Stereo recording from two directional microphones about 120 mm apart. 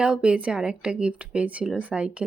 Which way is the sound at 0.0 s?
10° right (ahead or behind).